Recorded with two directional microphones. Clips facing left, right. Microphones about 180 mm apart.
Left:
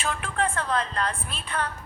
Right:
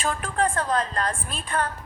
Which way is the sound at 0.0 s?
40° right (ahead or behind).